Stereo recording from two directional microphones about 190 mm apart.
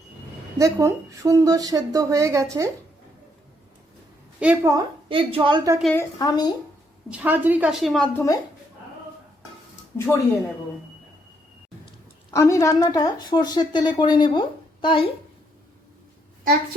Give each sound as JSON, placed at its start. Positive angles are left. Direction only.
{"t": 0.6, "sound": "speech", "side_deg": -15}
{"t": 4.4, "sound": "a woman's voice", "side_deg": -5}
{"t": 4.7, "sound": "a woman's voice", "side_deg": -25}
{"t": 5.8, "sound": "a woman's voice", "side_deg": 10}
{"t": 6.1, "sound": "a woman's voice", "side_deg": 20}
{"t": 7.1, "sound": "a woman's voice", "side_deg": -10}
{"t": 12.3, "sound": "a woman's voice", "side_deg": 15}